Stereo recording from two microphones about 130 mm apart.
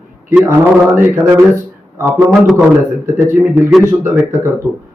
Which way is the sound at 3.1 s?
20° right (ahead or behind).